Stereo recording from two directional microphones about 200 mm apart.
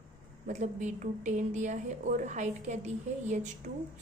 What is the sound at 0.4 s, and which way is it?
A woman's voice, 40° right (ahead or behind).